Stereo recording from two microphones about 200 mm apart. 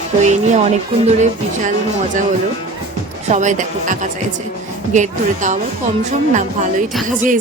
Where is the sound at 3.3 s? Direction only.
35° right (ahead or behind).